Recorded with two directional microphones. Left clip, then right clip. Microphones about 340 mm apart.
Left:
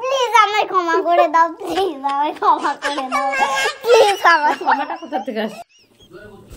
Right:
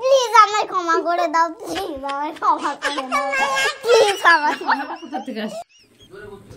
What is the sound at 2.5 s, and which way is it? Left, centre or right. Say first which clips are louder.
Speech: left 3 dB; centre.